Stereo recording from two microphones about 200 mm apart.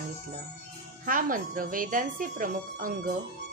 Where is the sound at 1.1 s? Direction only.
45° right (ahead or behind).